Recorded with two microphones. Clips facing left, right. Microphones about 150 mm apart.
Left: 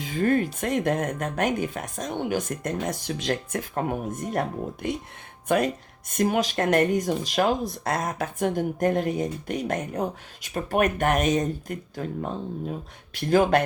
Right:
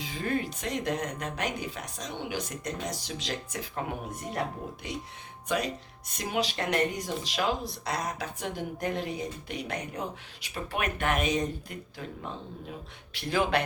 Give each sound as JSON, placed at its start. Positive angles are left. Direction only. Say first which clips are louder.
{"t": 0.0, "sound": "speech", "louder": "left 8 dB", "side_deg": 50}